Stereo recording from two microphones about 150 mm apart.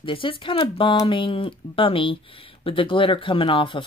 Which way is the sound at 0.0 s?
35° left (ahead or behind).